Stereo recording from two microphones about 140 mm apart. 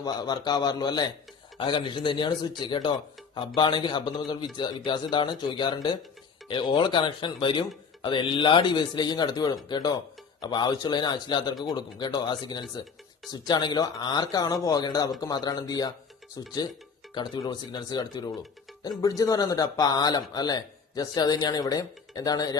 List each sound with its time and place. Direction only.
0.0 s speech: 30° left (ahead or behind)
17.2 s speech: 30° left (ahead or behind)